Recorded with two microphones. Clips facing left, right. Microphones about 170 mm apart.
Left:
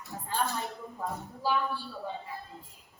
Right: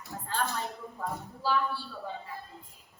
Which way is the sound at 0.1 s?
15° left (ahead or behind).